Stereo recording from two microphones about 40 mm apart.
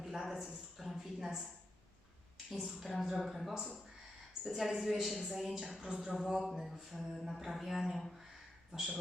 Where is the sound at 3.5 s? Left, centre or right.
Centre.